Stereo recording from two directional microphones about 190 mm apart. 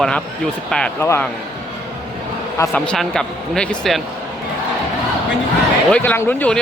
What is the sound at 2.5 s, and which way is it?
Speech, 10° left (ahead or behind).